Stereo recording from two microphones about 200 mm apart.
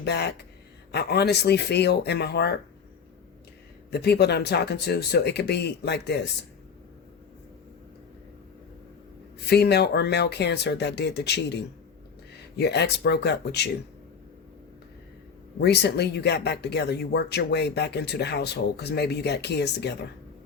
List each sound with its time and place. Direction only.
0.0 s speech: 55° left (ahead or behind)
3.9 s speech: 55° left (ahead or behind)
9.5 s speech: 55° left (ahead or behind)
15.6 s speech: 55° left (ahead or behind)